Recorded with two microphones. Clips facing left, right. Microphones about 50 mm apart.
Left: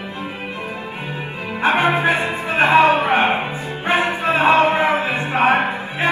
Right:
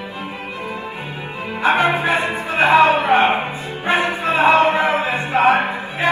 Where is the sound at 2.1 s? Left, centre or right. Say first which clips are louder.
Right 2 dB; right.